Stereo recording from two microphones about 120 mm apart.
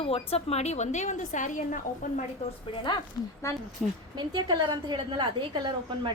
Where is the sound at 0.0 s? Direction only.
55° left (ahead or behind); by 2.2 s 90° left.